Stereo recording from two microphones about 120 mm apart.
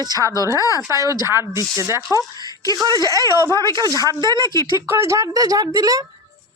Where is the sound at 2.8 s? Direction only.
35° right (ahead or behind).